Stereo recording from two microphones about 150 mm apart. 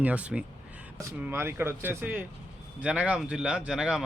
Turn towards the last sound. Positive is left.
turn(degrees=-5)  # may be behind; listen again after turning